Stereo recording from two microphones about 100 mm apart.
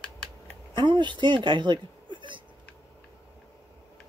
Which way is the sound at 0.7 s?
50° right (ahead or behind).